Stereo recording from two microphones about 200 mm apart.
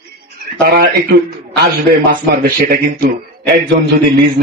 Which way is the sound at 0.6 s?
50° right (ahead or behind).